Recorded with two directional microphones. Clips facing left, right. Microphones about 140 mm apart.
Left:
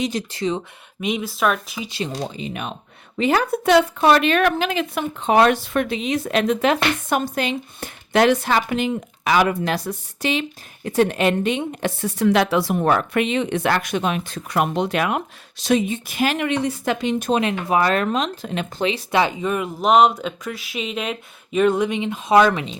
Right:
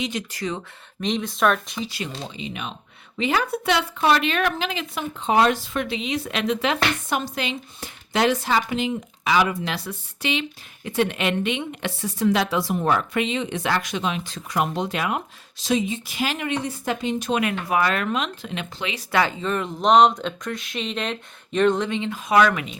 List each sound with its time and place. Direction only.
0.0 s speech: 35° left (ahead or behind)
1.0 s speech: 5° left (ahead or behind)
2.1 s a woman's voice: 45° left (ahead or behind)
9.7 s a woman's voice: 45° left (ahead or behind); by 17.2 s 75° left (ahead or behind)
17.7 s speech: 35° left (ahead or behind)
18.9 s speech: 20° left (ahead or behind)